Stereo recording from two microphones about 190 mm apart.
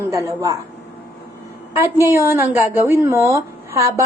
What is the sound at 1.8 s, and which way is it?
A woman's voice, 15° right (ahead or behind).